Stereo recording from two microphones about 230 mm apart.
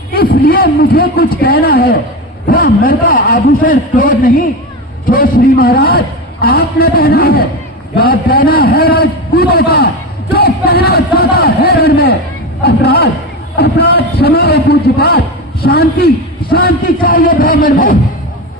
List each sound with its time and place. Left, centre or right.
0.1 s a man's voice: left
10.3 s a sound: left
12.6 s a man's voice: left